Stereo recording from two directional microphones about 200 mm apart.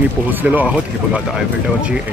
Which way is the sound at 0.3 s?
10° right (ahead or behind).